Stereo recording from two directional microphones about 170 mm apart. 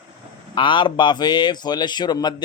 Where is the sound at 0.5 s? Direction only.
30° left (ahead or behind).